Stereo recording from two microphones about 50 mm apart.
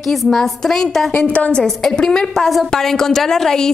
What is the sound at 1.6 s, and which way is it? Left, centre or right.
A woman's voice, centre.